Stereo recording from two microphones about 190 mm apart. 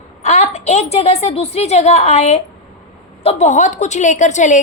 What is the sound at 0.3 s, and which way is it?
A woman's voice, 35° left (ahead or behind).